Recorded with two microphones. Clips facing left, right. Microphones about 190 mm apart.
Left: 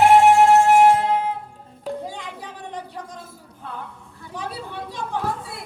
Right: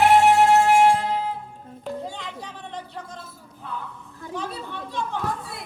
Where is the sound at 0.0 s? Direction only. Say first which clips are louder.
Left 3 dB; 45° left (ahead or behind).